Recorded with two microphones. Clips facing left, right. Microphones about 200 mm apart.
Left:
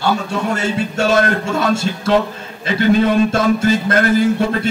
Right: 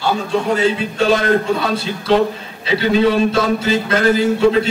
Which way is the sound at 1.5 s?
45° left (ahead or behind).